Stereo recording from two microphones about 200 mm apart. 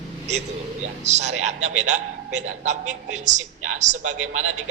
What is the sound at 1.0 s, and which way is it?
A man's voice, 35° right (ahead or behind).